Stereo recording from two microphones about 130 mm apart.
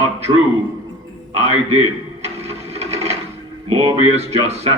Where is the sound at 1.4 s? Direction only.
55° right (ahead or behind).